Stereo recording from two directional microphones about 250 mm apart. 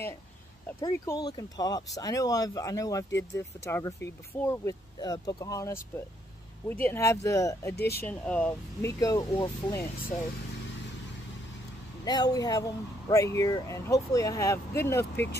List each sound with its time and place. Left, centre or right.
0.7 s speech: centre
7.7 s speech: left
8.0 s speech: centre
12.0 s speech: centre